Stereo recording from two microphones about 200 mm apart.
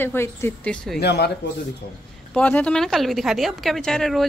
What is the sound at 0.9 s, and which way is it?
Speech, 55° left (ahead or behind).